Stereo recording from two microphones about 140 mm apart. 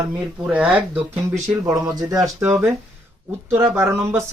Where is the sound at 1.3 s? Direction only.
20° right (ahead or behind).